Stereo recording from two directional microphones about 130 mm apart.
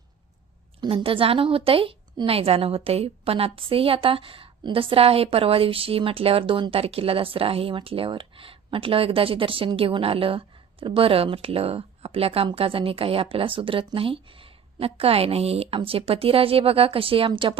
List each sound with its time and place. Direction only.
0.8 s a woman's voice: 40° right (ahead or behind)